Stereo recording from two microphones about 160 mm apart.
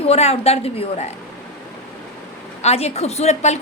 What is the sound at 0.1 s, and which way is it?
A woman's voice, 40° left (ahead or behind).